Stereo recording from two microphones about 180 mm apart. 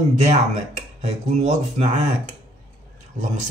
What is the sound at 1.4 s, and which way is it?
Speech, 40° right (ahead or behind).